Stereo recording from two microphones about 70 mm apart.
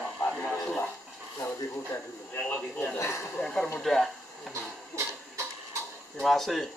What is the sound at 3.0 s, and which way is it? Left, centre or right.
Speech, left.